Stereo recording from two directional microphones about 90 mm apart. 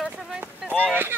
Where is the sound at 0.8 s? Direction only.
20° right (ahead or behind).